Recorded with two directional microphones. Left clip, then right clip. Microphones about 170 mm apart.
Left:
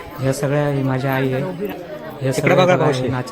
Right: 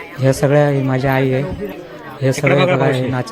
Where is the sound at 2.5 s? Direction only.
35° left (ahead or behind).